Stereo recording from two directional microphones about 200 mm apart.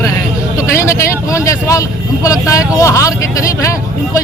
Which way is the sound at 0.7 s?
15° left (ahead or behind).